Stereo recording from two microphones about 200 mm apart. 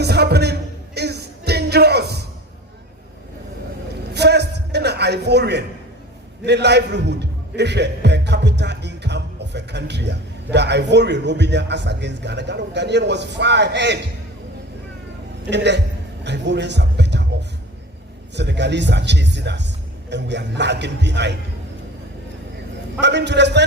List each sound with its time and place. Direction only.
0.0 s music: 55° right (ahead or behind)
4.1 s a sound: 55° right (ahead or behind)
6.4 s a man's voice: 60° right (ahead or behind)
15.4 s a man's voice: 60° right (ahead or behind)
18.3 s a man's voice: 60° right (ahead or behind)
23.0 s a man's voice: 60° right (ahead or behind)